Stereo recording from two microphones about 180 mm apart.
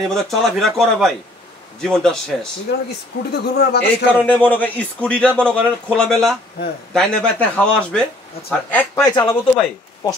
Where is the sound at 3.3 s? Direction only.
65° left (ahead or behind).